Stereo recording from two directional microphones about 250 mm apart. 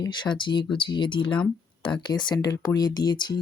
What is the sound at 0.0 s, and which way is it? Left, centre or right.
Speech, centre.